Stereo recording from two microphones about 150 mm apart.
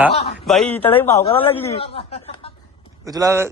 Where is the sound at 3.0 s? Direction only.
20° right (ahead or behind).